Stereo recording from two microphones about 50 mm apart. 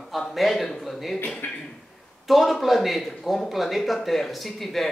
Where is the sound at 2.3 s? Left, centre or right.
Centre.